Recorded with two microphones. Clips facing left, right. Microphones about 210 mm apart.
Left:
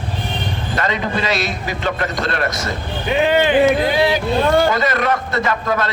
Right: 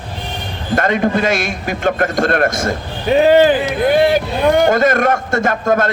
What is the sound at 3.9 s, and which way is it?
Speech, 50° right (ahead or behind).